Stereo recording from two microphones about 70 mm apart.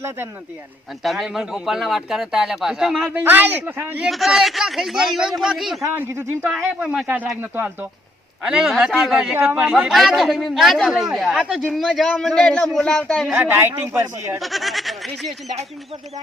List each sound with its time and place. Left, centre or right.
1.0 s speech: centre
3.1 s speech: right
4.1 s speech: centre
5.8 s speech: right
6.7 s speech: right
8.4 s a man's voice: centre
8.9 s speech: centre
9.3 s speech: right
9.7 s speech: centre
11.6 s a man's voice: centre
13.3 s speech: right
13.9 s speech: right
14.3 s speech: centre